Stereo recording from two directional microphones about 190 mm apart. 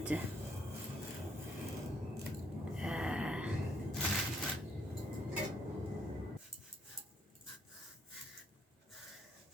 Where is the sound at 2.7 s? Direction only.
5° right (ahead or behind).